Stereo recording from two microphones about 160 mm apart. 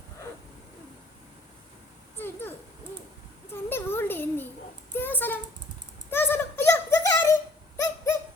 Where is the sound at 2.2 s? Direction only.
15° left (ahead or behind).